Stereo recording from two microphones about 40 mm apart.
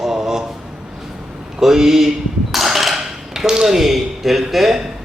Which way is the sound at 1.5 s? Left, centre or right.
Centre.